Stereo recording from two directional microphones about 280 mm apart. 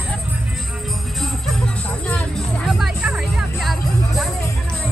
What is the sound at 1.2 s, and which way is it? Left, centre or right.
Music, centre.